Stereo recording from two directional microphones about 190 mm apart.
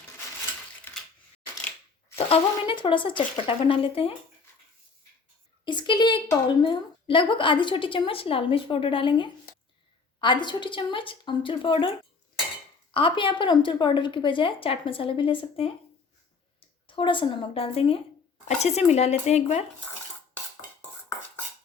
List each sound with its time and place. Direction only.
2.1 s a woman's voice: 30° left (ahead or behind)
5.6 s a woman's voice: 25° left (ahead or behind)
12.9 s a woman's voice: 25° left (ahead or behind)
16.8 s a woman's voice: 25° left (ahead or behind)